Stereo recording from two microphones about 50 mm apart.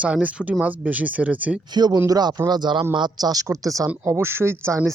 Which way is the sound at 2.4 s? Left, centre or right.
Right.